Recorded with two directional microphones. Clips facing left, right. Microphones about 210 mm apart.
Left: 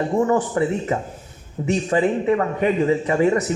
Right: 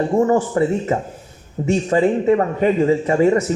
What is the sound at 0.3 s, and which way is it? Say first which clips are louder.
Speech: right 3 dB; 30° right (ahead or behind).